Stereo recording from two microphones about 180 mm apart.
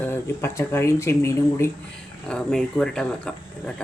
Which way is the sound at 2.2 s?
5° left (ahead or behind).